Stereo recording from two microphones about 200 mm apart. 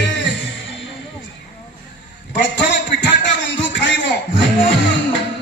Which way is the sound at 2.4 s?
60° left (ahead or behind).